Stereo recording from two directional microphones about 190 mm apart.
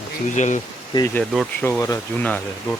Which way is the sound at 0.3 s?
40° left (ahead or behind).